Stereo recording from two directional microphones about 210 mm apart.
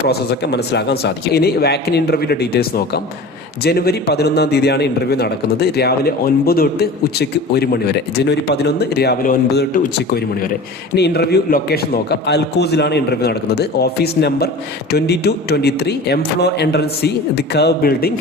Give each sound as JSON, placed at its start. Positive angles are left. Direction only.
{"t": 0.1, "sound": "a man's voice", "side_deg": 50}